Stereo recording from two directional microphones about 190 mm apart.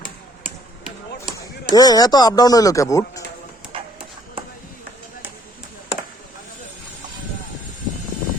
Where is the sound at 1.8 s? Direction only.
20° left (ahead or behind).